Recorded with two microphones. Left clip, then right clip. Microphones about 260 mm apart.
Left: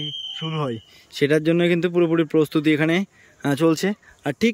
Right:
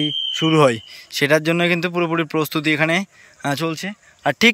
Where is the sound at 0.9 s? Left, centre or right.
Centre.